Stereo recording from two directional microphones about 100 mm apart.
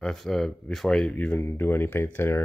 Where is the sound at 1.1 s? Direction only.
20° left (ahead or behind).